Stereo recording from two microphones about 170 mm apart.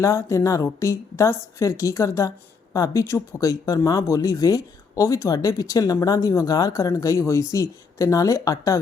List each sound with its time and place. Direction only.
0.0 s a woman's voice: 15° left (ahead or behind)